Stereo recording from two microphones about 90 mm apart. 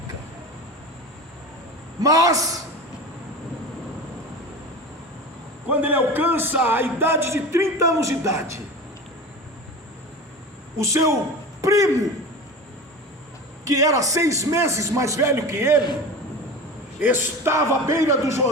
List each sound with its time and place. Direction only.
2.0 s a man's voice: 40° right (ahead or behind)
5.6 s a man's voice: 20° right (ahead or behind); by 8.5 s 35° right (ahead or behind)
10.8 s a man's voice: 35° right (ahead or behind)
13.7 s a man's voice: 40° right (ahead or behind)
17.0 s a man's voice: 25° right (ahead or behind)